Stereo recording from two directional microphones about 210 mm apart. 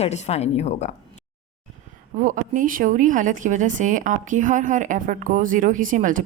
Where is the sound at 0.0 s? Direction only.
30° left (ahead or behind).